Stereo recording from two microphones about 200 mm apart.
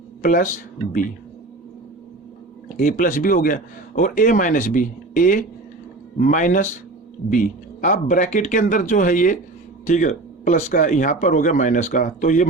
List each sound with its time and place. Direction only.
0.2 s speech: 40° left (ahead or behind)
2.7 s speech: 40° left (ahead or behind)